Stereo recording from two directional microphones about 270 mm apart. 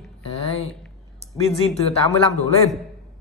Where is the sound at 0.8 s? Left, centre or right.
Centre.